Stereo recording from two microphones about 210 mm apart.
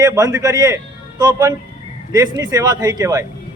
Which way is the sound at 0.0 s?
15° right (ahead or behind).